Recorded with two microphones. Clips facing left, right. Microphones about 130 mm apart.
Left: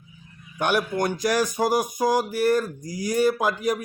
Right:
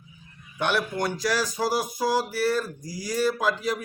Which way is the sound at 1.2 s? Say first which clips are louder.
Left 4 dB; 50° left (ahead or behind).